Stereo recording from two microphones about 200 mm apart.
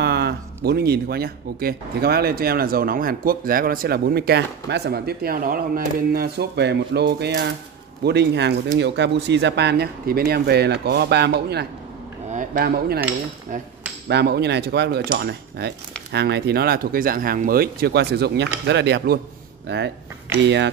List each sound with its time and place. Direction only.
0.0 s a sound: 55° right (ahead or behind)
0.7 s speech: 50° right (ahead or behind)
12.3 s speech: 40° right (ahead or behind)
14.0 s speech: 55° right (ahead or behind)
20.4 s speech: 60° right (ahead or behind)